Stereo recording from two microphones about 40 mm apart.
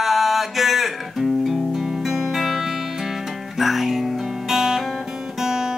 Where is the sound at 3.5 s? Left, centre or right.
Centre.